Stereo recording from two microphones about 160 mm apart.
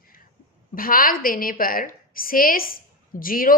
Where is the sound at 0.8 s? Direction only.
60° left (ahead or behind).